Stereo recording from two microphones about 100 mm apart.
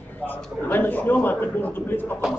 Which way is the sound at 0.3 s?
20° left (ahead or behind).